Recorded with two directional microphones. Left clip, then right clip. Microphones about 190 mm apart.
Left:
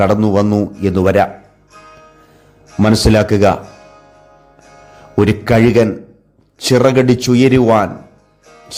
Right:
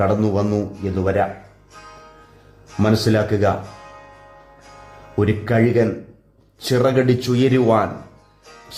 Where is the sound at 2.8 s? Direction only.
30° left (ahead or behind).